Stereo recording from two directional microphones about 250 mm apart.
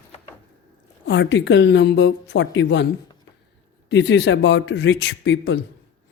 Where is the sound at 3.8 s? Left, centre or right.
Left.